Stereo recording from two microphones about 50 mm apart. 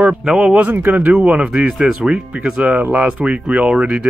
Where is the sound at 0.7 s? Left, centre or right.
Right.